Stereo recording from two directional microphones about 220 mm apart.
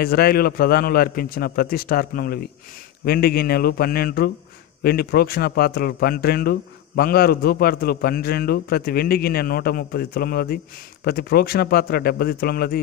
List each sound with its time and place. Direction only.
0.0 s speech: 45° left (ahead or behind)